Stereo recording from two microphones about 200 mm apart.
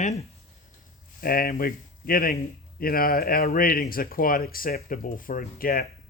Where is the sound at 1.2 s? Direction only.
50° left (ahead or behind).